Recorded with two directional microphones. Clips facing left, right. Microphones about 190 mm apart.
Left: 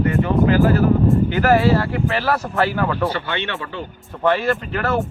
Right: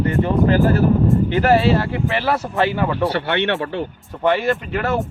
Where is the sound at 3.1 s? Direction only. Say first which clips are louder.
Right 6 dB; 65° right (ahead or behind).